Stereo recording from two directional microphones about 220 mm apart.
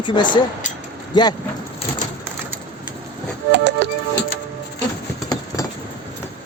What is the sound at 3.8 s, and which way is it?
Music, 50° right (ahead or behind).